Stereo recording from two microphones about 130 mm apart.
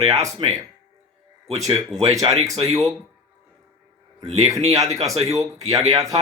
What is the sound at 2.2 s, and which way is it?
Speech, 40° right (ahead or behind).